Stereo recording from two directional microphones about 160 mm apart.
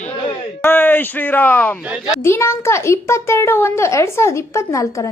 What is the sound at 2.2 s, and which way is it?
A child's voice, 15° left (ahead or behind).